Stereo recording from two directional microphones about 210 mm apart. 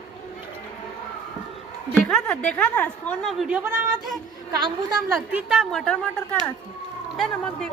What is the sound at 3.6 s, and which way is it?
Speech, 10° right (ahead or behind).